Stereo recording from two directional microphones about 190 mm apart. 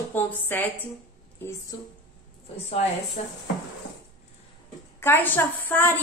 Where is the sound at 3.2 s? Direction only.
35° left (ahead or behind).